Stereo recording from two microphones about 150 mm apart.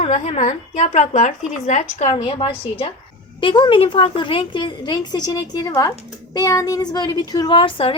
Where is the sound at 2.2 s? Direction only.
40° left (ahead or behind).